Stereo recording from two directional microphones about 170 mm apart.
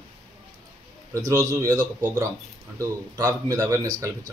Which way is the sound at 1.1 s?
20° right (ahead or behind).